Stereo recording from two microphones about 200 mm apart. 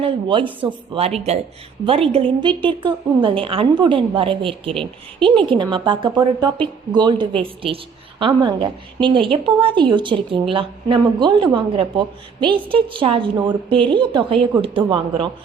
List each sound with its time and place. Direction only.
0.0 s a woman's voice: 25° right (ahead or behind)